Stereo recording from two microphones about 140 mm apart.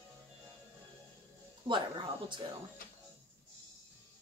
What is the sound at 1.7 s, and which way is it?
Speech, 35° right (ahead or behind).